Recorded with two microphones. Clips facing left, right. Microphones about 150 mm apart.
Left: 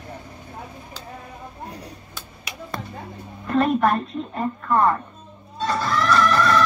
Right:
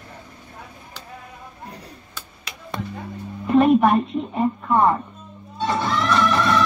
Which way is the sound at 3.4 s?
10° right (ahead or behind).